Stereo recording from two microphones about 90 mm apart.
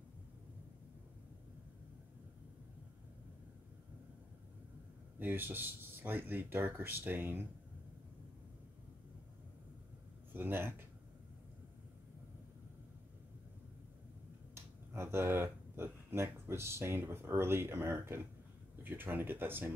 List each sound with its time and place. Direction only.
5.2 s speech: 25° right (ahead or behind)
10.3 s speech: 25° right (ahead or behind)
14.5 s speech: 30° right (ahead or behind)